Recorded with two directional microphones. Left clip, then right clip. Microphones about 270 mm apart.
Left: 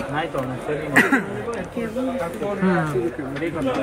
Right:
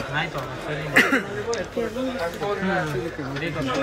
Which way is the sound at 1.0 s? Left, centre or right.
Left.